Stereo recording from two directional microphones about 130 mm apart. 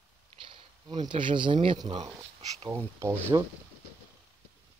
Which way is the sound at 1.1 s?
40° right (ahead or behind).